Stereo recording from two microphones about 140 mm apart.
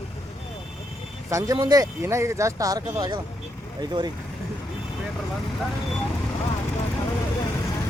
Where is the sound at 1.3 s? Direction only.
20° right (ahead or behind).